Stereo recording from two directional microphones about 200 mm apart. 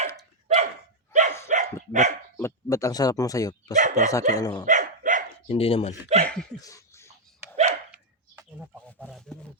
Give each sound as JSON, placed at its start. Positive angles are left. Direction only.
{"t": 0.4, "sound": "dog", "side_deg": -35}
{"t": 1.9, "sound": "speech", "side_deg": -35}
{"t": 2.4, "sound": "speech", "side_deg": 15}
{"t": 3.8, "sound": "speech", "side_deg": -40}
{"t": 4.4, "sound": "speech", "side_deg": 20}
{"t": 4.6, "sound": "dog", "side_deg": -40}
{"t": 5.5, "sound": "speech", "side_deg": 30}
{"t": 6.2, "sound": "a sound", "side_deg": 5}
{"t": 6.6, "sound": "a sound", "side_deg": 15}
{"t": 7.5, "sound": "dog", "side_deg": -35}
{"t": 7.9, "sound": "a sound", "side_deg": -5}